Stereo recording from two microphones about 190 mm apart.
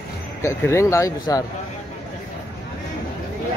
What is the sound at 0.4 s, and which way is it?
Speech, 15° left (ahead or behind).